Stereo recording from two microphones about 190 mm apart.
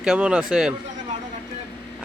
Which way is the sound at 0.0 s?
5° right (ahead or behind).